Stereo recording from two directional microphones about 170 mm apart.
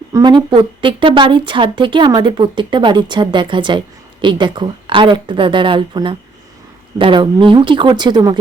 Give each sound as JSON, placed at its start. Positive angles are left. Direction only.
{"t": 0.1, "sound": "a woman's voice", "side_deg": -25}